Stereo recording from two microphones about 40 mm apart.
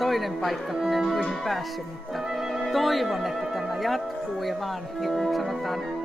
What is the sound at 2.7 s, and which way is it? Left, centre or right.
Speech, centre.